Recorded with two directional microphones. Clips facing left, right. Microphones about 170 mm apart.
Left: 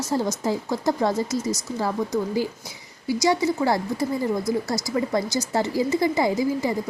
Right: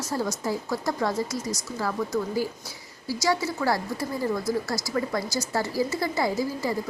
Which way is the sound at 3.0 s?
20° left (ahead or behind).